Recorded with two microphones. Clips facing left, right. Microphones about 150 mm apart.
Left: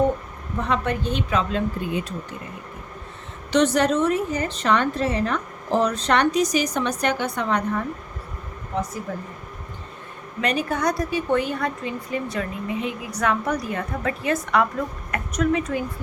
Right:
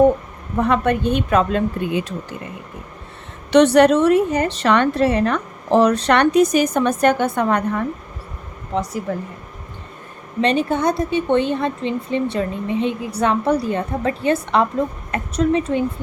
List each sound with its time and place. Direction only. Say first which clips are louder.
0.6 s a woman's voice: right 7 dB; 60° right (ahead or behind)
1.9 s speech: right 4 dB; 90° right
3.5 s a woman's voice: right 7 dB; 65° right (ahead or behind)
8.7 s speech: right 4 dB; 90° right
10.4 s a woman's voice: right 5 dB; 25° right (ahead or behind)